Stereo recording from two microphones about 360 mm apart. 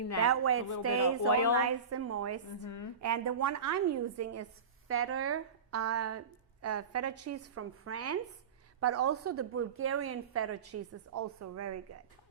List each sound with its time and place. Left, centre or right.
0.3 s a woman's voice: right
1.3 s a woman's voice: left
1.5 s a woman's voice: right